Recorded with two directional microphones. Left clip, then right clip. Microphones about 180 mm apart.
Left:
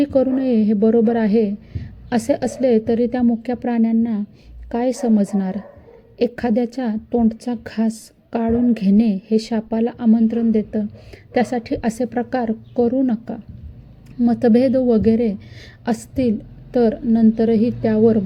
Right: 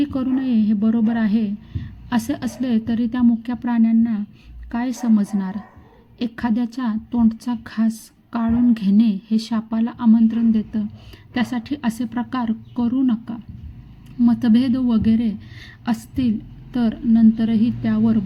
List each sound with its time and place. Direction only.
0.0 s a woman's voice: 15° left (ahead or behind)